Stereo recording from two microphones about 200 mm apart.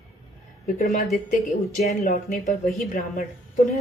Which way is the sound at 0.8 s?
45° left (ahead or behind).